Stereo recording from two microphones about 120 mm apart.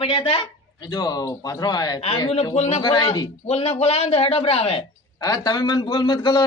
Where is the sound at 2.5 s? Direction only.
65° left (ahead or behind).